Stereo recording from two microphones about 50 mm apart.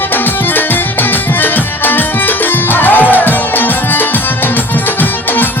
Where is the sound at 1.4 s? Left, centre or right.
Left.